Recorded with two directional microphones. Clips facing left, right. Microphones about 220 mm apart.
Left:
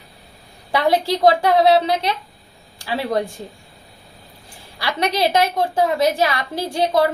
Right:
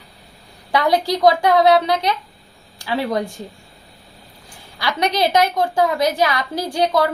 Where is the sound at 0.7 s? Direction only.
30° left (ahead or behind).